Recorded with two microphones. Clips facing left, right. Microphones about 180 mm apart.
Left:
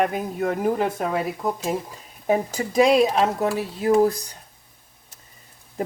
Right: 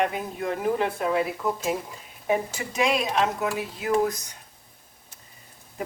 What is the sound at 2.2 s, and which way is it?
Speech, 40° left (ahead or behind).